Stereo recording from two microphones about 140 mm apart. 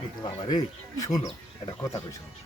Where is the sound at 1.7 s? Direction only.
25° left (ahead or behind).